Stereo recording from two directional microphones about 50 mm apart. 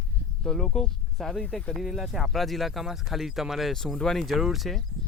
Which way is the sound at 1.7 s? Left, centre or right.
Centre.